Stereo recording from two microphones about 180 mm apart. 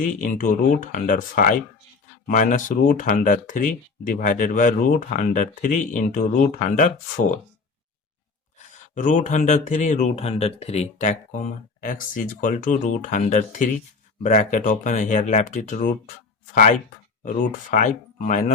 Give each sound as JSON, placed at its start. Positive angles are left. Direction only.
{"t": 0.0, "sound": "speech", "side_deg": 45}
{"t": 9.0, "sound": "speech", "side_deg": 45}
{"t": 17.2, "sound": "speech", "side_deg": 45}